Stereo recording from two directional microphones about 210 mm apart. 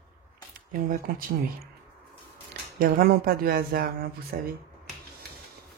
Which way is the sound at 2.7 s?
45° right (ahead or behind).